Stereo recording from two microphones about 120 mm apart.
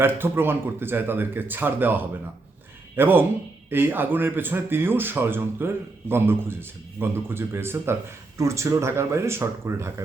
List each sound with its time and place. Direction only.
0.0 s speech: 20° right (ahead or behind)